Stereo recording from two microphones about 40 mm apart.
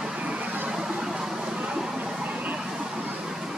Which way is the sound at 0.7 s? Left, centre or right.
Centre.